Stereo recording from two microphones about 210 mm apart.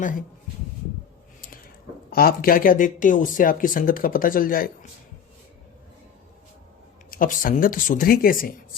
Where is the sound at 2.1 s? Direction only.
45° left (ahead or behind).